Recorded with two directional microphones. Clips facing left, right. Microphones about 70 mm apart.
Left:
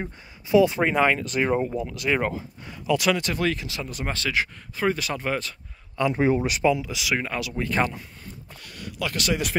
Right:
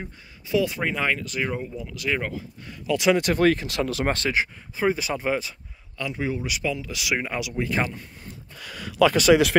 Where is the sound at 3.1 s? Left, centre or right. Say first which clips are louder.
Right 6 dB; right.